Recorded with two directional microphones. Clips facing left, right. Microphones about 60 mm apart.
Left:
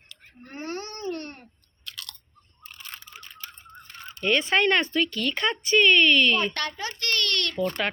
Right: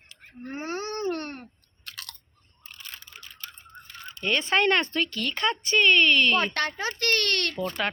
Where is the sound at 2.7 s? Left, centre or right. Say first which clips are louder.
Left 1 dB; centre.